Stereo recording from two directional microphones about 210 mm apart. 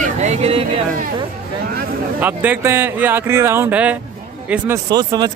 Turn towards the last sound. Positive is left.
turn(degrees=-20)  # may be behind; listen again after turning